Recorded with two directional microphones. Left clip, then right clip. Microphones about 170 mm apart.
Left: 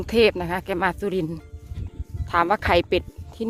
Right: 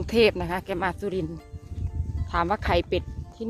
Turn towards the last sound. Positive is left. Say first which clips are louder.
# left 5 dB
turn(degrees=45)  # may be behind; listen again after turning